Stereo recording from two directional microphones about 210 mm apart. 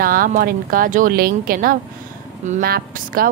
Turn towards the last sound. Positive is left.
turn(degrees=-45)  # may be behind; listen again after turning